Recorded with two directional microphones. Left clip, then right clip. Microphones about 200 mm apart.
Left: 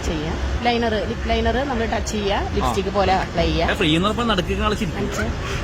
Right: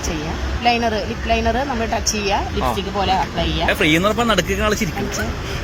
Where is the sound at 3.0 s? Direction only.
20° left (ahead or behind).